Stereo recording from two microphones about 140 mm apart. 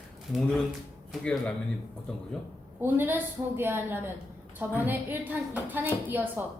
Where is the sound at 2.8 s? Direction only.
15° right (ahead or behind).